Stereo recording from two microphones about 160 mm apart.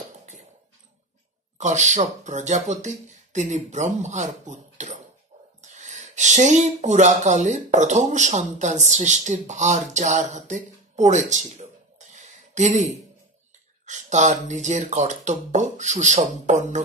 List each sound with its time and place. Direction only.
1.6 s speech: 50° right (ahead or behind)